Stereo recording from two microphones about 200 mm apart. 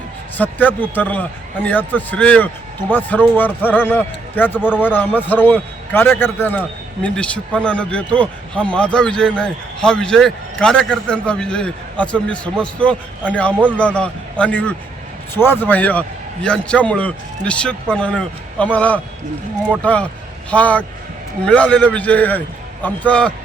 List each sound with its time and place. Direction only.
0.3 s a man's voice: 10° left (ahead or behind)